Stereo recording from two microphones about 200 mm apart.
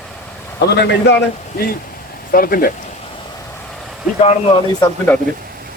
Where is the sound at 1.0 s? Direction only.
55° left (ahead or behind).